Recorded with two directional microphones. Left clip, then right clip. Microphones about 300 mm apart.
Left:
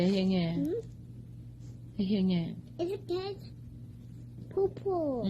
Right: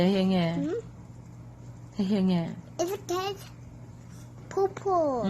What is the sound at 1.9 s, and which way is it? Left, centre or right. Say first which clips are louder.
A woman's voice: right 4 dB; centre.